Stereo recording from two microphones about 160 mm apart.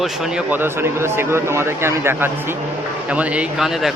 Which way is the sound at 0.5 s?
15° right (ahead or behind).